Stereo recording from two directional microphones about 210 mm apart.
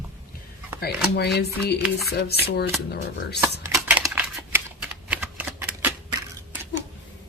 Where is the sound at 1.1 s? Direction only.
50° left (ahead or behind).